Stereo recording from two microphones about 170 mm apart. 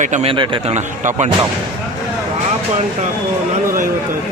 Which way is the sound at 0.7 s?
45° right (ahead or behind).